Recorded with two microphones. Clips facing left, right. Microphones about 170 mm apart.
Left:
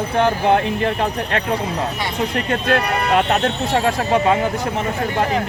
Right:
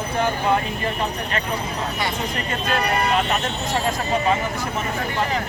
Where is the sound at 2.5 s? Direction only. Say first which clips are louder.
Left 3 dB; 65° left (ahead or behind).